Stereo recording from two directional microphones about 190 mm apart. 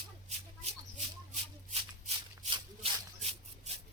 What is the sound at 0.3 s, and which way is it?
Shuffle, 35° right (ahead or behind).